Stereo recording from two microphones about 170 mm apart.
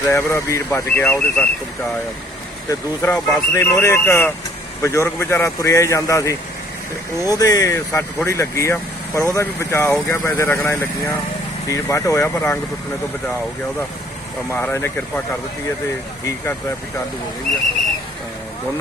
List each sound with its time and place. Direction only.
0.1 s speech: 15° left (ahead or behind)
2.6 s speech: 15° left (ahead or behind)
14.5 s speech: 15° left (ahead or behind)